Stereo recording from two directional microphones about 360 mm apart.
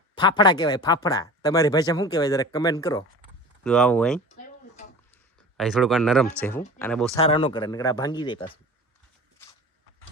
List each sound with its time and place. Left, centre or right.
0.2 s speech: centre
5.5 s speech: centre
7.2 s speech: centre